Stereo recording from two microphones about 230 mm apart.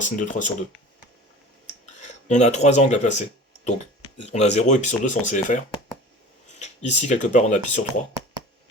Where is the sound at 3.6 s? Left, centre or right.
Left.